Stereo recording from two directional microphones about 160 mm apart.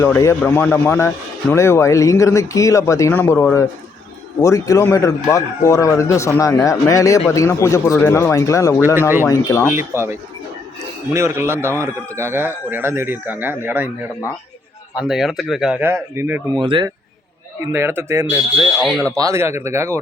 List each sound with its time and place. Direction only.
0.0 s speech: 15° left (ahead or behind)
9.0 s speech: 15° right (ahead or behind)
9.2 s speech: 20° left (ahead or behind)
9.6 s speech: 15° right (ahead or behind)
14.9 s speech: 5° right (ahead or behind)
16.6 s speech: 30° right (ahead or behind)
17.7 s speech: 15° right (ahead or behind)
18.8 s speech: centre (ahead or behind)
19.1 s speech: 20° right (ahead or behind)